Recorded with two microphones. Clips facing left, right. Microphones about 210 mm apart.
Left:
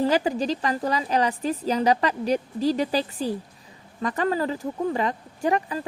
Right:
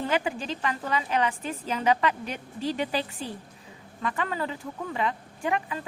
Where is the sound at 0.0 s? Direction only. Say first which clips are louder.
Left 6 dB; 35° left (ahead or behind).